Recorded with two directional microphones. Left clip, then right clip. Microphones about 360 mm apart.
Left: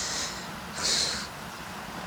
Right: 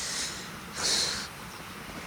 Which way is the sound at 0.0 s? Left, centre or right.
Centre.